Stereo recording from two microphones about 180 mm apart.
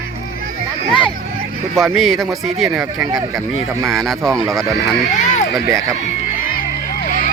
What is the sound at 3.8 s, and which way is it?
Speech, centre (ahead or behind).